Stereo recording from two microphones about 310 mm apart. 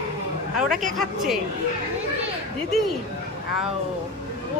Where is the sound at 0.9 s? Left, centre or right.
Centre.